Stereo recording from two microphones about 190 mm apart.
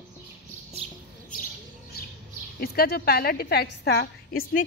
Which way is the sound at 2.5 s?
55° left (ahead or behind).